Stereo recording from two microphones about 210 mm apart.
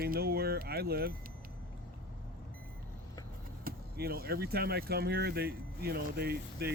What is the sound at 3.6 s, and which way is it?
Speech, 45° right (ahead or behind).